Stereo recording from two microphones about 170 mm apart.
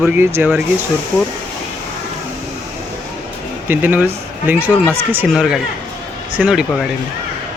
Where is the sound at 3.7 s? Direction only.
10° right (ahead or behind).